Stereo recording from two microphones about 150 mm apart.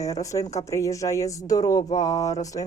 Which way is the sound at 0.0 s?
20° left (ahead or behind).